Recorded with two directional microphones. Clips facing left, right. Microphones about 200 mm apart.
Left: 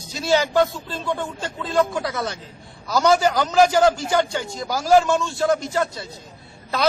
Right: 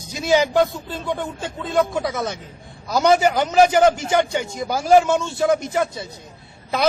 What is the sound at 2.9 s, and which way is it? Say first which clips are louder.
A man's voice: right 1 dB; 20° right (ahead or behind).